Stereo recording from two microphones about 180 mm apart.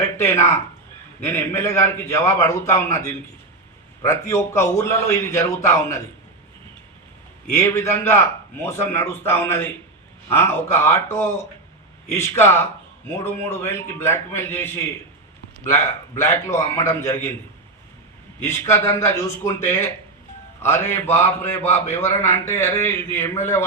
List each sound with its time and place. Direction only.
0.0 s a man's voice: 15° left (ahead or behind)
7.5 s a man's voice: 15° left (ahead or behind)
18.4 s a man's voice: 15° left (ahead or behind)